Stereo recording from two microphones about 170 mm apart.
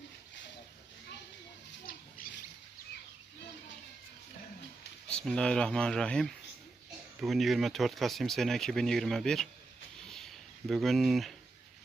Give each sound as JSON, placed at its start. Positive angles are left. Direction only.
{"t": 2.2, "sound": "rodents", "side_deg": 55}
{"t": 5.0, "sound": "speech", "side_deg": 5}
{"t": 10.7, "sound": "speech", "side_deg": 0}